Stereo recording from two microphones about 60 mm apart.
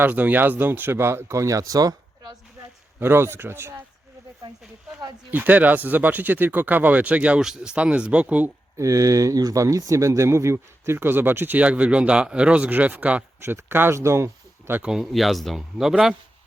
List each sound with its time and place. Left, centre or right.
0.0 s speech: right
3.0 s speech: right
5.3 s speech: right
7.3 s speech: centre
8.8 s speech: right
11.6 s speech: right
13.4 s speech: right
15.0 s speech: centre